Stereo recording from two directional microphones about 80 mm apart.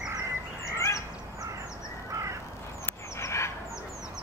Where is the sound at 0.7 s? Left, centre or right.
Left.